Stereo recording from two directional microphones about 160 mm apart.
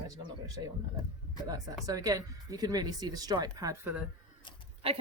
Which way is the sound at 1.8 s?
20° right (ahead or behind).